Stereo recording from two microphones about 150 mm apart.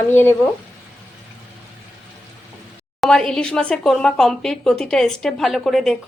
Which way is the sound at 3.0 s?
5° left (ahead or behind).